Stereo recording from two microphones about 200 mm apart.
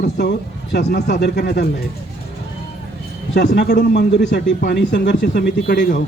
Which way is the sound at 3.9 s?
60° left (ahead or behind).